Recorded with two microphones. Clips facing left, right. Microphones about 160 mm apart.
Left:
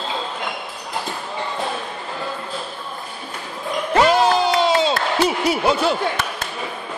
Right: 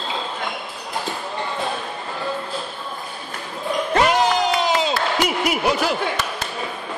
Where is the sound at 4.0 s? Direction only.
30° left (ahead or behind).